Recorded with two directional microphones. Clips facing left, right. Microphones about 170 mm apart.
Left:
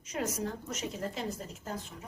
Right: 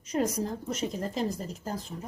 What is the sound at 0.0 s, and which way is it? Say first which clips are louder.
A woman's voice: right 6 dB; 35° right (ahead or behind).